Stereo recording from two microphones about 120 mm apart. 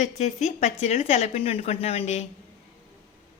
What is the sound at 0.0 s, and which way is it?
Speech, 75° left (ahead or behind).